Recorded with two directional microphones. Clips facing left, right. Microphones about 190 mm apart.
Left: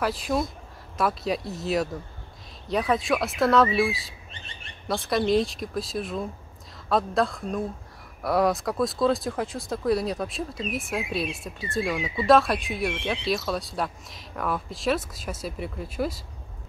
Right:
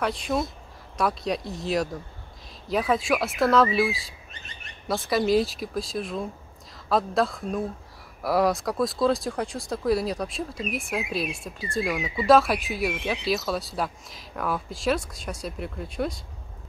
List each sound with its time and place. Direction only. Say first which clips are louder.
0.0 s speech: even; centre (ahead or behind)
4.3 s bird: left 1 dB; 30° left (ahead or behind)
4.8 s speech: right 1 dB; centre (ahead or behind)